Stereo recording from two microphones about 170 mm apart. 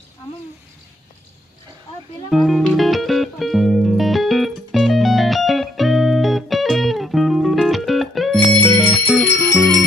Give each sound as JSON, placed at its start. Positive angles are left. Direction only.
{"t": 2.3, "sound": "music", "side_deg": 0}
{"t": 8.6, "sound": "bell", "side_deg": 10}
{"t": 9.5, "sound": "bell", "side_deg": -25}